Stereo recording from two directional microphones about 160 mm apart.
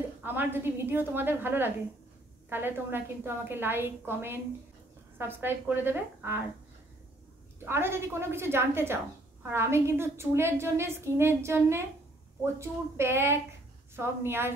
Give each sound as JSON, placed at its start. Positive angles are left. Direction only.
{"t": 0.2, "sound": "a woman's voice", "side_deg": -10}
{"t": 7.6, "sound": "a woman's voice", "side_deg": -15}